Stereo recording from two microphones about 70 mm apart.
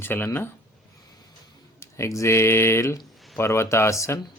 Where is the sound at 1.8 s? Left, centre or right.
Left.